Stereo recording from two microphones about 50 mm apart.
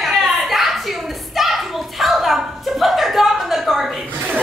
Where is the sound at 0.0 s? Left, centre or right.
Centre.